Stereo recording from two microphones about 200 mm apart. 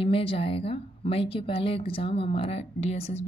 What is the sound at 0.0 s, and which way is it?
Speech, 25° left (ahead or behind).